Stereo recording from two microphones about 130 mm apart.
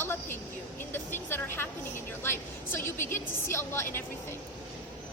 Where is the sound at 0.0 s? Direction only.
15° left (ahead or behind).